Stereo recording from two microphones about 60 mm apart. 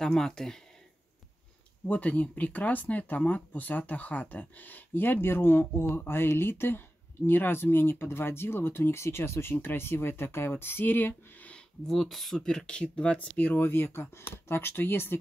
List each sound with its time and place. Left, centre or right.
0.0 s speech: centre
1.9 s speech: left
11.9 s speech: centre
13.5 s speech: left